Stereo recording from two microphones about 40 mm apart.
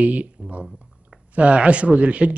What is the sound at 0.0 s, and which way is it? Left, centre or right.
Speech, right.